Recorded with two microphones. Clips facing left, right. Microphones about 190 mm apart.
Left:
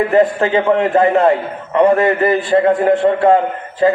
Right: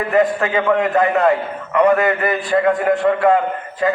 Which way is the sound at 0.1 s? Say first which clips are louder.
Left 3 dB; 30° left (ahead or behind).